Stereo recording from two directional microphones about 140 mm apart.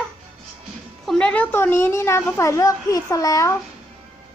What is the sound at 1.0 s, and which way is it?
A woman's voice, 5° left (ahead or behind).